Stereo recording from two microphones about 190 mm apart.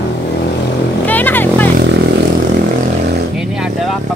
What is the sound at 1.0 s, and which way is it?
Vehicle, 10° left (ahead or behind).